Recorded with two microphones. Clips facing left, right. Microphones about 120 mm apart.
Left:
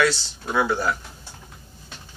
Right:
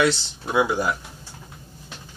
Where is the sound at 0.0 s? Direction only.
20° right (ahead or behind).